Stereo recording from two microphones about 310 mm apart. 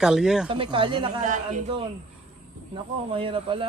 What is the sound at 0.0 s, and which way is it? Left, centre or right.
Speech, centre.